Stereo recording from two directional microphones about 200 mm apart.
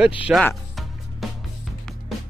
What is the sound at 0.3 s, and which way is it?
Speech, 5° right (ahead or behind).